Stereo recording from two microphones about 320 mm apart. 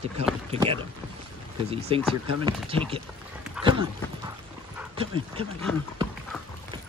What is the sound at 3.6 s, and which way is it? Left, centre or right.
Dog, centre.